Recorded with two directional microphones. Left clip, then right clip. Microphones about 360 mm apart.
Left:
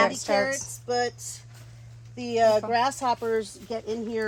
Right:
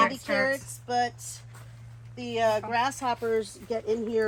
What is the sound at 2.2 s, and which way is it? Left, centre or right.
Speech, left.